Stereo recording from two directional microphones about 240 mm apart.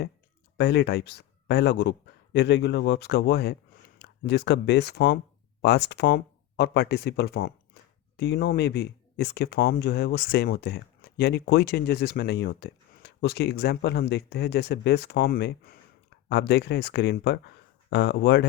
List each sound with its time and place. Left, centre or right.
0.5 s speech: left